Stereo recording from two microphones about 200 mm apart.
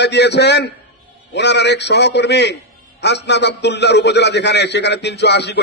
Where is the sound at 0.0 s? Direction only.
60° left (ahead or behind).